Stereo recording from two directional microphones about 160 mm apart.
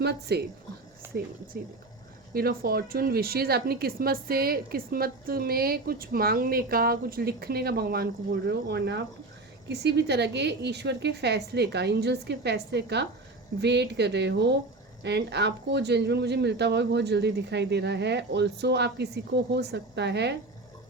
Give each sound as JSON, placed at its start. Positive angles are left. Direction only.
{"t": 0.0, "sound": "speech", "side_deg": -90}
{"t": 1.1, "sound": "a woman's voice", "side_deg": -75}